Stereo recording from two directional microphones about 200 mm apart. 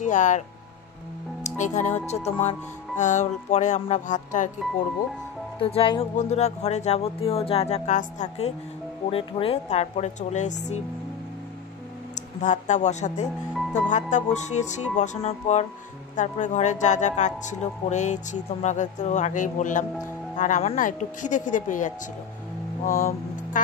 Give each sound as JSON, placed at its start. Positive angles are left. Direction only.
{"t": 0.0, "sound": "speech", "side_deg": 40}
{"t": 1.4, "sound": "speech", "side_deg": 35}
{"t": 5.6, "sound": "speech", "side_deg": 25}
{"t": 12.2, "sound": "speech", "side_deg": 35}